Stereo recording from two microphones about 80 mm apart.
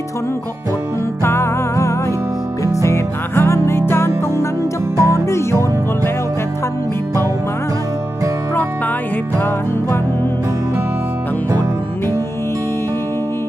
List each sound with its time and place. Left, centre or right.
1.2 s music: left
4.9 s music: right